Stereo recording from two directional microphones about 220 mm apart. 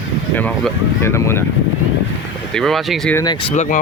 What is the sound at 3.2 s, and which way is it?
Speech, 20° left (ahead or behind).